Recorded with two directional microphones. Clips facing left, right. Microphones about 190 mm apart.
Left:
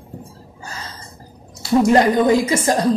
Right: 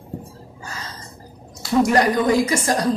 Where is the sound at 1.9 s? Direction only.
25° left (ahead or behind).